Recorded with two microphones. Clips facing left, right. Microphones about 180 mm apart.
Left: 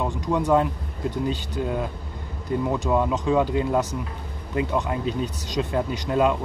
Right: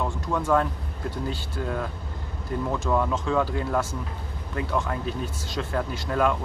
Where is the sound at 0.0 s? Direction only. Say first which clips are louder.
Left 3 dB; 15° left (ahead or behind).